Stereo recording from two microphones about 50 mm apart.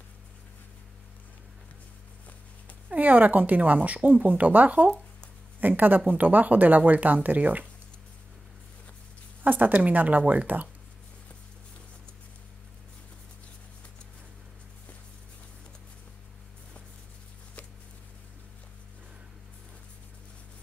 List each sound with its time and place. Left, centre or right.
2.9 s speech: right
9.4 s speech: right